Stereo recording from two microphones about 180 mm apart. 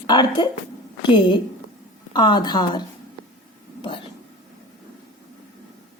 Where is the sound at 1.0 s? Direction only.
25° left (ahead or behind).